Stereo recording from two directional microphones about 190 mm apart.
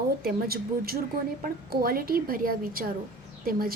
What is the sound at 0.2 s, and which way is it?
Speech, 55° right (ahead or behind).